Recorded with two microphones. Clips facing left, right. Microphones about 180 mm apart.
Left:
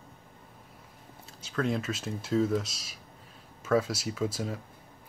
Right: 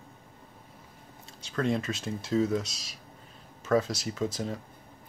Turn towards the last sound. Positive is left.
turn(degrees=5)  # may be behind; listen again after turning